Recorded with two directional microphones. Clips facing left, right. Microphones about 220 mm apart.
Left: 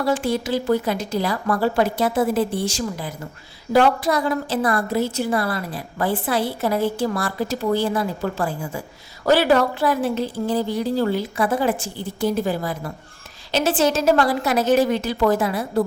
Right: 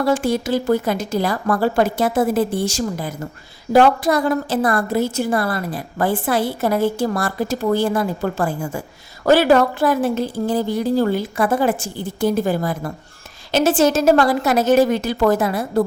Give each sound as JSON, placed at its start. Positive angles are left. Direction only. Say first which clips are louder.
{"t": 0.1, "sound": "a woman's voice", "louder": "right 1 dB", "side_deg": -45}